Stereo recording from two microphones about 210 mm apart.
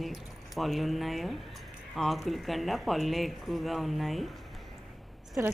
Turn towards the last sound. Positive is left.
turn(degrees=-10)  # may be behind; listen again after turning